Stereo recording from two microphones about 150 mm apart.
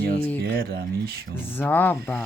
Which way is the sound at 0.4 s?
85° right.